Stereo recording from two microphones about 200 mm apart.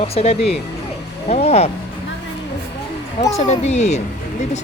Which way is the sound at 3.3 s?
35° left (ahead or behind).